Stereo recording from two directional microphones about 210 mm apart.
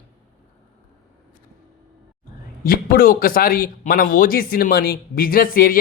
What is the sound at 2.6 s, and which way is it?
Speech, 45° left (ahead or behind).